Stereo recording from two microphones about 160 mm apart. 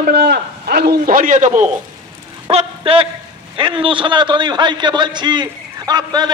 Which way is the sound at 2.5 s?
40° right (ahead or behind).